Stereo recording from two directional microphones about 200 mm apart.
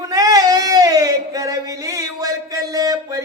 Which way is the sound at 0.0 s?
15° right (ahead or behind).